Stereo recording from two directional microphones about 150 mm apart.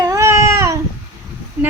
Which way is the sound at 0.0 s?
20° right (ahead or behind).